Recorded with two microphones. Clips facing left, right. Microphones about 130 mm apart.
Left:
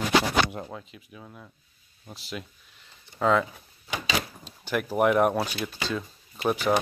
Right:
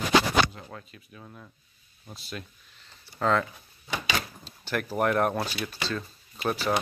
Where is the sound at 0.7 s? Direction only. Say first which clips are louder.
Left 3 dB; 10° left (ahead or behind).